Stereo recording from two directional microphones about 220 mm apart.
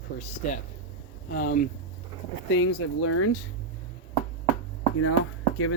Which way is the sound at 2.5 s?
70° left (ahead or behind).